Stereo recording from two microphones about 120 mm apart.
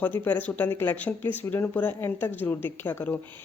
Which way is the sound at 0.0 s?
15° left (ahead or behind).